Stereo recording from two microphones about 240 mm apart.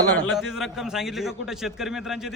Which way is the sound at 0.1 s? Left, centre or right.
Centre.